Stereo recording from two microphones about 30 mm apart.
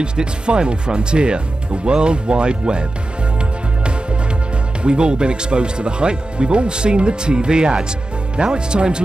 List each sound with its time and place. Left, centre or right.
0.0 s speech: right
4.8 s speech: right